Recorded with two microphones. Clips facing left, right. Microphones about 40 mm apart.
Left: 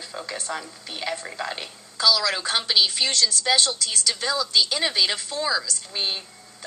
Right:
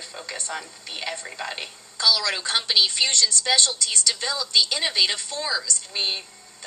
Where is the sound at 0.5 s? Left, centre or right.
Centre.